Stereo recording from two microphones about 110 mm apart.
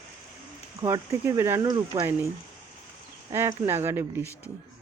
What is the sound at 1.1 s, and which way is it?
Speech, 20° right (ahead or behind).